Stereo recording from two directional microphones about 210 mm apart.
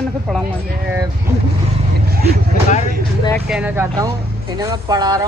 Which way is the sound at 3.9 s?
20° right (ahead or behind).